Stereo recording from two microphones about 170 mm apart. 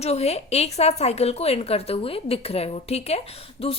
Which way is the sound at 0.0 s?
40° left (ahead or behind).